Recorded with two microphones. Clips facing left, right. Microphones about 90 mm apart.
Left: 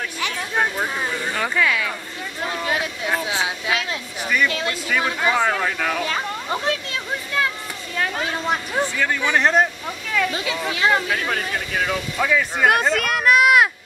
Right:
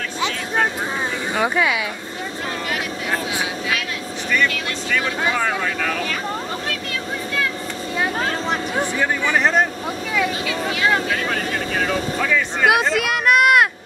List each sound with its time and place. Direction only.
1.3 s speech: 20° right (ahead or behind)
3.3 s a sound: 25° left (ahead or behind)
4.5 s vehicle: 25° left (ahead or behind)
5.6 s speech: 10° left (ahead or behind)
8.7 s speech: 20° right (ahead or behind)
9.3 s speech: centre (ahead or behind)
12.6 s a sound: 5° right (ahead or behind)